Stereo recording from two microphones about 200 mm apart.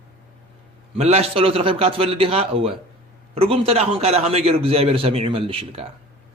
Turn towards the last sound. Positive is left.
turn(degrees=-30)  # may be behind; listen again after turning